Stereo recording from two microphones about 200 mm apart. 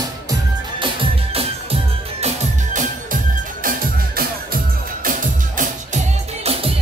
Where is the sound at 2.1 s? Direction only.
35° right (ahead or behind).